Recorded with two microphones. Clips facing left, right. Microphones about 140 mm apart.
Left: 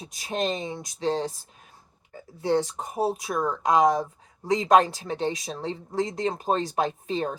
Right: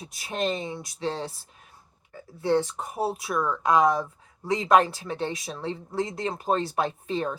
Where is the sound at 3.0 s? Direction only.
20° left (ahead or behind).